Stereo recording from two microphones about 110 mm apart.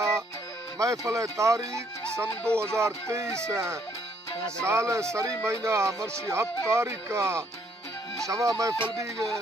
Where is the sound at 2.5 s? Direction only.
10° left (ahead or behind).